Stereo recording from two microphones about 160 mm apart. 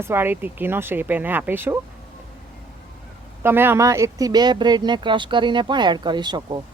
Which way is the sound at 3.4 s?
15° right (ahead or behind).